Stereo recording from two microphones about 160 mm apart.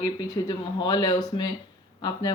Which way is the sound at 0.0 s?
30° left (ahead or behind).